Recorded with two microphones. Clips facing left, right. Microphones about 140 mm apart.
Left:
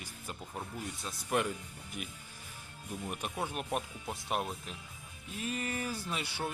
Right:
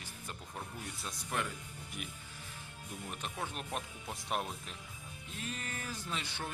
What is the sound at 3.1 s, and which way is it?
Speech, 10° left (ahead or behind).